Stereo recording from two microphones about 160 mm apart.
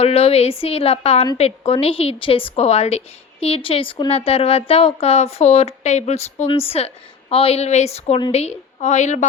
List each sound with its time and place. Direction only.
0.0 s a woman's voice: 40° left (ahead or behind)